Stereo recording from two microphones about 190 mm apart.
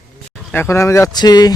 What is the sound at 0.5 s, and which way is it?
Speech, 15° left (ahead or behind).